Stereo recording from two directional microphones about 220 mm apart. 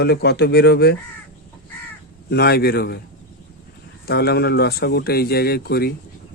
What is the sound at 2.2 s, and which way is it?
Speech, 45° left (ahead or behind).